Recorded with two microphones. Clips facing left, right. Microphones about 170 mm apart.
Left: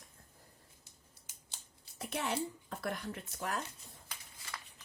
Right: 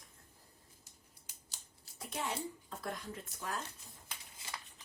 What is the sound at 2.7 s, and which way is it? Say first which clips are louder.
Speech: left 3 dB; 70° left (ahead or behind).